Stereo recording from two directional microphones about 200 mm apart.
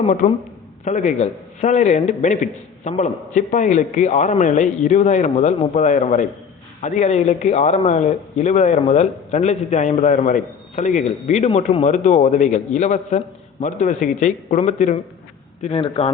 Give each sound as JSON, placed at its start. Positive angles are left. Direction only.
{"t": 0.0, "sound": "a man's voice", "side_deg": 35}